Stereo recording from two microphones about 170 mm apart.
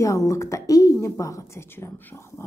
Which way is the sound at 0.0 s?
20° left (ahead or behind).